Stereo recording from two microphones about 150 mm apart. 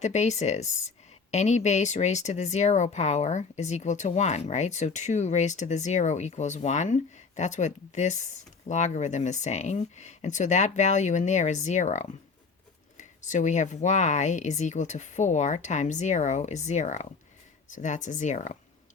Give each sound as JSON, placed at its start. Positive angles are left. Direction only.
{"t": 0.0, "sound": "speech", "side_deg": 50}